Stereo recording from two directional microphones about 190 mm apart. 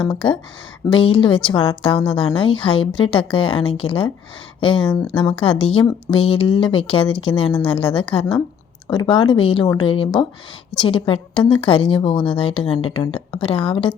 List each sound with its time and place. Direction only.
0.1 s speech: 25° left (ahead or behind)